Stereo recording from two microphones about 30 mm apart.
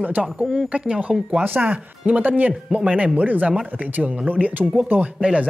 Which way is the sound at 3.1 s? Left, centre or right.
Right.